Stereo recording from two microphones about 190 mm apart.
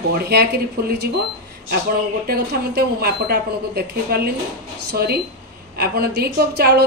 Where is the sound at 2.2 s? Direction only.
55° right (ahead or behind).